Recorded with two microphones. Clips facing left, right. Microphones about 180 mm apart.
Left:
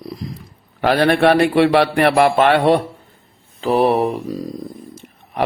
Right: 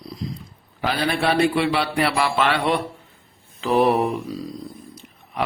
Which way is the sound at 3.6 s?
35° left (ahead or behind).